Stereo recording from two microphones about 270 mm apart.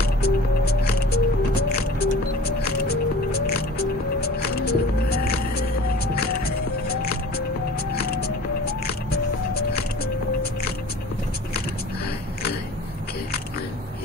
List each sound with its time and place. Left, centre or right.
0.0 s music: left
7.0 s music: left